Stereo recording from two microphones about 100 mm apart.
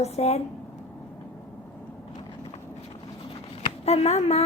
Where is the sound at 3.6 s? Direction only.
90° left.